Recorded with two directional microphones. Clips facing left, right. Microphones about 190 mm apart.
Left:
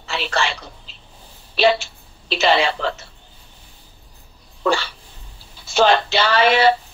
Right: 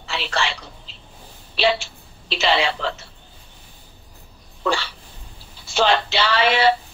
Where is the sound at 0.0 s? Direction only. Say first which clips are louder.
Left 2 dB; 45° left (ahead or behind).